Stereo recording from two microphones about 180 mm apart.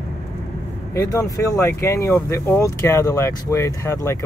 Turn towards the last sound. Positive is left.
turn(degrees=15)  # may be behind; listen again after turning